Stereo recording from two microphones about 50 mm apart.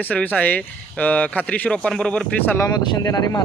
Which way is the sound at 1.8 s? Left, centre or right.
Centre.